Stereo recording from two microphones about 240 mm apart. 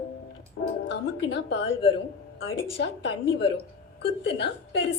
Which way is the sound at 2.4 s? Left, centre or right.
Left.